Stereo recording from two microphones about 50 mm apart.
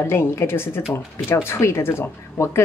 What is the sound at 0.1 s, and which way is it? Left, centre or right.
Speech, left.